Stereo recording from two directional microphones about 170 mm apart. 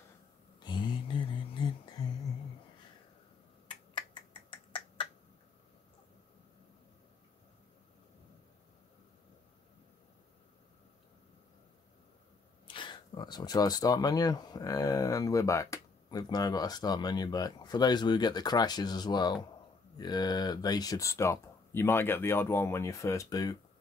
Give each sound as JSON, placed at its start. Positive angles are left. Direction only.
{"t": 0.6, "sound": "a sound", "side_deg": 25}
{"t": 3.9, "sound": "finger snapping", "side_deg": 30}
{"t": 12.6, "sound": "speech", "side_deg": 30}